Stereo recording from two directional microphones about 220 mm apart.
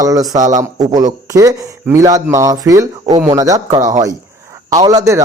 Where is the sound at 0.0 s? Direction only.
15° right (ahead or behind).